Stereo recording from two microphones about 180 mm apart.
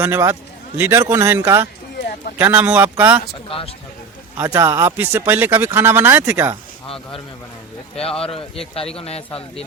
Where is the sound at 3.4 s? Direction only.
30° left (ahead or behind).